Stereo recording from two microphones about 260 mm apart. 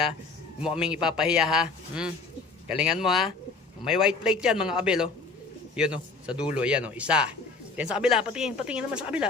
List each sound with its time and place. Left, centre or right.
1.0 s speech: centre